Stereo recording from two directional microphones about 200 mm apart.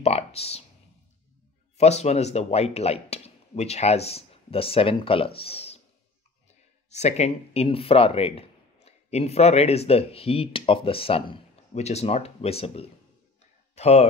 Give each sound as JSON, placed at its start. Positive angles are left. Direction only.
{"t": 0.0, "sound": "speech", "side_deg": 30}
{"t": 1.8, "sound": "speech", "side_deg": 35}
{"t": 6.9, "sound": "speech", "side_deg": 35}
{"t": 13.4, "sound": "a sound", "side_deg": 30}